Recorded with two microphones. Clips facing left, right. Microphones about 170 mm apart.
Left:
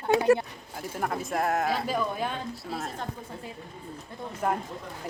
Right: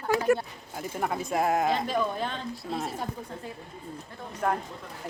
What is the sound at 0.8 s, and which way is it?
Speech, centre (ahead or behind).